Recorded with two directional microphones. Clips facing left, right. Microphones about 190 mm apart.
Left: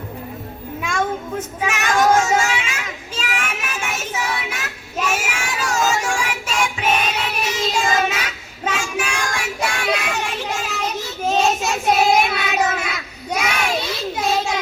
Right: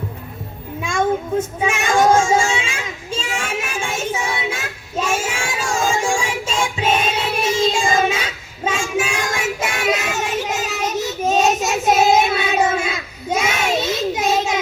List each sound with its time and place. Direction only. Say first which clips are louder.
1.6 s children playing: right 1 dB; 25° right (ahead or behind)
8.8 s child singing: right 3 dB; 25° right (ahead or behind)